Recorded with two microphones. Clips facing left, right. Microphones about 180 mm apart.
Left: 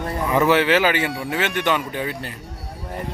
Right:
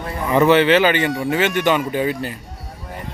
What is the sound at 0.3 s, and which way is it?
Speech, 5° left (ahead or behind).